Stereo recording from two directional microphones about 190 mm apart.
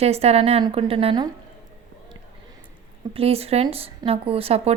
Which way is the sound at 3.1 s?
30° right (ahead or behind).